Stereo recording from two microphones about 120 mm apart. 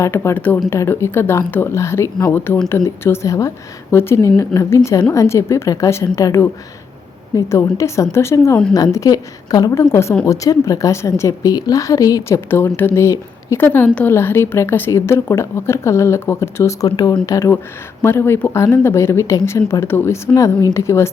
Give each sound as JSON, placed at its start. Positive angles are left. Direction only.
{"t": 0.0, "sound": "a woman's voice", "side_deg": 20}
{"t": 13.7, "sound": "a woman's voice", "side_deg": 15}